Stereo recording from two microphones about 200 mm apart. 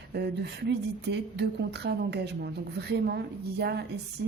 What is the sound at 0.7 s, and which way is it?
A woman's voice, 55° right (ahead or behind).